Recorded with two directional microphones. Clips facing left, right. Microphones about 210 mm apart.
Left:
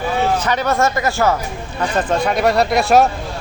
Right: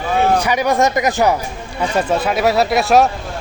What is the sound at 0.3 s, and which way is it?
Speech, 10° right (ahead or behind).